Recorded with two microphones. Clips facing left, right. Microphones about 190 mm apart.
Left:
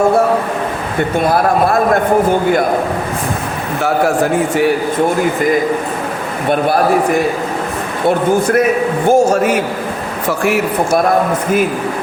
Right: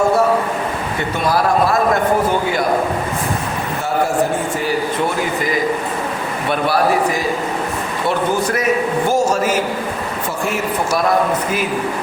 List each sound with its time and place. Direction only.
1.2 s a man's voice: 55° left (ahead or behind)
6.5 s a man's voice: 55° left (ahead or behind)